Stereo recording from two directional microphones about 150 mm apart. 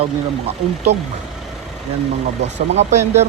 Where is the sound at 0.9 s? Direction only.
45° right (ahead or behind).